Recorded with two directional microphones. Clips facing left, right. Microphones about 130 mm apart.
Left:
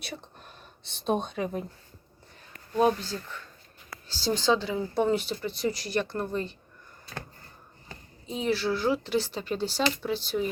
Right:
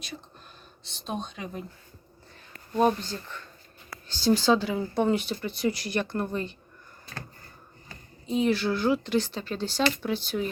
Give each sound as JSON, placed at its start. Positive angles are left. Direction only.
{"t": 0.9, "sound": "speech", "side_deg": 55}
{"t": 2.7, "sound": "speech", "side_deg": 0}
{"t": 8.3, "sound": "speech", "side_deg": 0}